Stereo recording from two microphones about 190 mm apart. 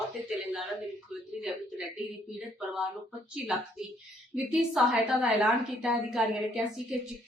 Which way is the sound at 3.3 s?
5° right (ahead or behind).